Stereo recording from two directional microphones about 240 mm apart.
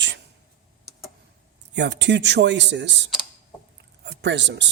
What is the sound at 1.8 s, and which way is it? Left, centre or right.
Speech, right.